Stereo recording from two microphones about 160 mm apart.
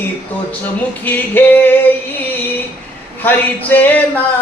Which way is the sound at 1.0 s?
10° left (ahead or behind).